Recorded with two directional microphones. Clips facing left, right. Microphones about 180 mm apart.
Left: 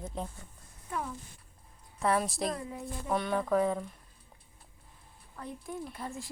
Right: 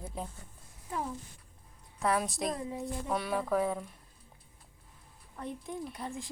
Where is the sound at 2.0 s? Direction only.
Centre (ahead or behind).